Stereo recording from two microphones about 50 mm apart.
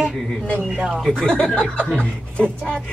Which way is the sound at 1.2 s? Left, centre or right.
Left.